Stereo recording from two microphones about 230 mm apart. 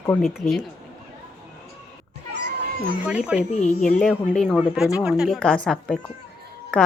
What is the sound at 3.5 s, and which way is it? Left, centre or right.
Speech, left.